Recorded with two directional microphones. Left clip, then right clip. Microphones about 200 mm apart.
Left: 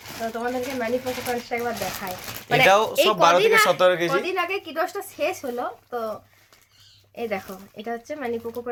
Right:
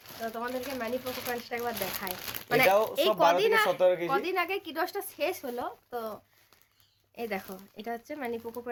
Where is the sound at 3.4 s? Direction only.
50° right (ahead or behind).